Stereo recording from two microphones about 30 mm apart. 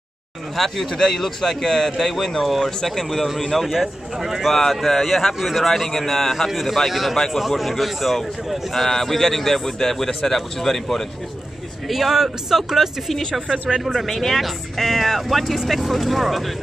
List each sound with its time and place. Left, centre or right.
0.6 s a man's voice: centre
3.5 s a man's voice: centre
4.5 s a man's voice: centre
5.7 s a man's voice: centre
11.9 s a man's voice: centre
13.7 s a man's voice: centre
14.0 s a man's voice: centre
14.3 s a man's voice: centre